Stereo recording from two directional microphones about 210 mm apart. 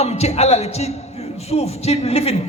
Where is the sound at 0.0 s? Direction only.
30° left (ahead or behind).